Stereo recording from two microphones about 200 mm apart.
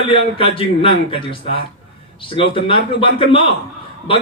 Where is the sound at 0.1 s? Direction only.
25° left (ahead or behind).